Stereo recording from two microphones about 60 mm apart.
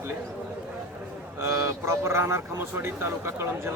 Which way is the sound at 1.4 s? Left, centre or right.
Right.